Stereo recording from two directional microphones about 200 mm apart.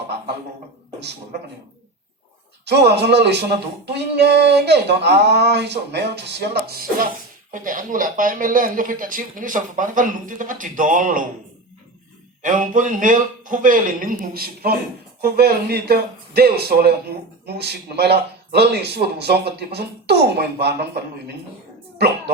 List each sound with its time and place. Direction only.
0.9 s a man's voice: 55° right (ahead or behind)
2.6 s speech: 55° right (ahead or behind)
12.4 s speech: 40° right (ahead or behind)